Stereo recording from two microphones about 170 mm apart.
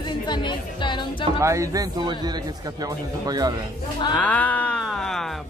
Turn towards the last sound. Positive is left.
turn(degrees=0)  # may be behind; listen again after turning